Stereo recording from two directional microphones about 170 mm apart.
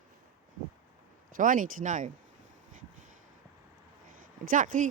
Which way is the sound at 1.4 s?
50° right (ahead or behind).